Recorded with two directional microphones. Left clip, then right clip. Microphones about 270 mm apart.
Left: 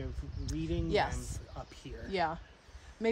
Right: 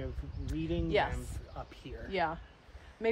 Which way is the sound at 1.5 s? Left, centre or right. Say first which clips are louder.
Right 3 dB; left.